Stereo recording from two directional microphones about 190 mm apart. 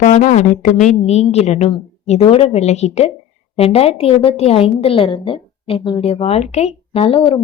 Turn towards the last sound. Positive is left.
turn(degrees=30)  # may be behind; listen again after turning